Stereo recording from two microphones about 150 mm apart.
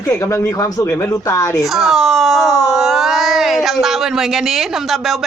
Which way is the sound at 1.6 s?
Centre (ahead or behind).